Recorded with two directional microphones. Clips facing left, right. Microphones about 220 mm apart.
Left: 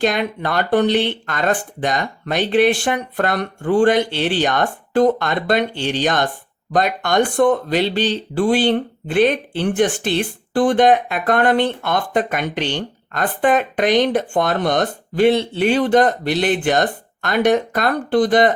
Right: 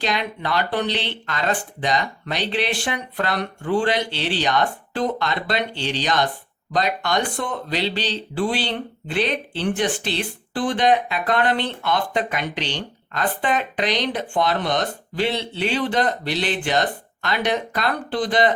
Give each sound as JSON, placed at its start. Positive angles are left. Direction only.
{"t": 0.0, "sound": "speech", "side_deg": 50}